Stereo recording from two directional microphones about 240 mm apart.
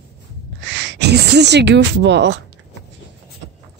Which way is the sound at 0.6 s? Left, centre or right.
Right.